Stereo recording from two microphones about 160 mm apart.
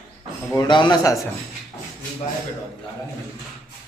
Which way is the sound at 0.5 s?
30° left (ahead or behind).